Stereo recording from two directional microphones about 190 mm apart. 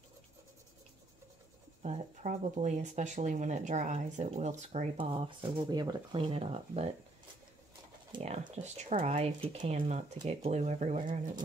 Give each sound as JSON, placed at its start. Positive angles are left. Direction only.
{"t": 1.8, "sound": "speech", "side_deg": -40}
{"t": 4.9, "sound": "speech", "side_deg": -25}
{"t": 8.1, "sound": "speech", "side_deg": -35}